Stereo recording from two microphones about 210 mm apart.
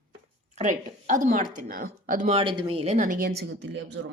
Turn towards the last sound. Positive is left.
turn(degrees=-60)  # may be behind; listen again after turning